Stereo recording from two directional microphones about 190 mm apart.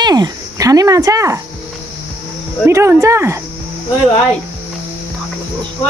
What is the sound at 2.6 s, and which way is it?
Speech, 15° right (ahead or behind).